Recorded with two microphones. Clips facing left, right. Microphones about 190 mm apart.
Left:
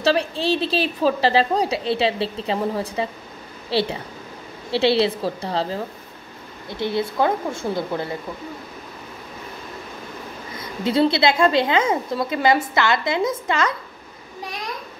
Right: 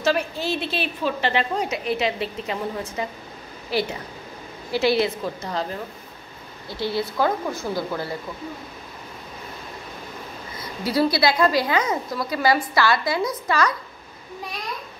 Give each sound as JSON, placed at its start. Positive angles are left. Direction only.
{"t": 0.0, "sound": "a woman's voice", "side_deg": 30}
{"t": 10.6, "sound": "a woman's voice", "side_deg": 25}